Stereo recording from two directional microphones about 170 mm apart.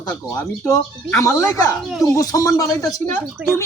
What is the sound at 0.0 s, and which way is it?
Speech, 20° left (ahead or behind).